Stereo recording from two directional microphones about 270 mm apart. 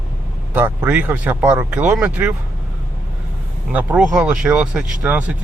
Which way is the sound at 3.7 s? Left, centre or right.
Centre.